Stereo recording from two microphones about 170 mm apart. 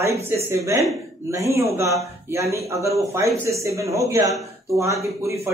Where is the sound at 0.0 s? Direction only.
15° right (ahead or behind).